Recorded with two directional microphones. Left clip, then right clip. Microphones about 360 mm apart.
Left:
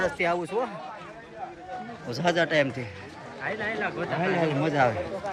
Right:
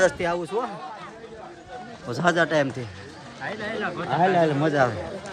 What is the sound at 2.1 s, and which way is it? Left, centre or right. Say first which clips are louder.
Speech: right 3 dB; centre.